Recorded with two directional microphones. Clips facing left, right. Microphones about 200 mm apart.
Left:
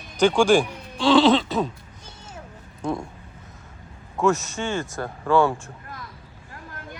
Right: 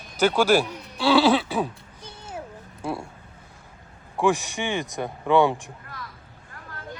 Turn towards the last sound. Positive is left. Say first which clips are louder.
# even
turn(degrees=-15)  # may be behind; listen again after turning